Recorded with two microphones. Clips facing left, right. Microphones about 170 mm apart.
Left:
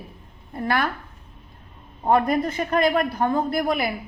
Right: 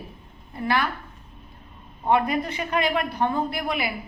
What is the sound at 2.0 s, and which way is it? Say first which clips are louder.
A man's voice: left 2 dB; 45° left (ahead or behind).